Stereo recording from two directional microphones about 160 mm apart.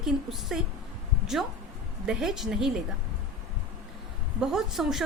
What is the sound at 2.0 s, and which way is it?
Speech, 5° right (ahead or behind).